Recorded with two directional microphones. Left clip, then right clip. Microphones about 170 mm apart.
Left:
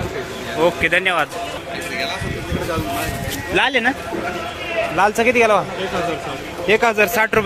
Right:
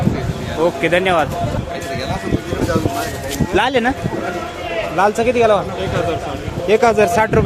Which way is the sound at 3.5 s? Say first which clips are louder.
Right 1 dB; 30° right (ahead or behind).